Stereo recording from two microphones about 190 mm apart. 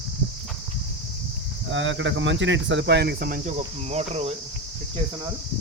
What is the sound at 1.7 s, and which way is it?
Cricket, 80° right.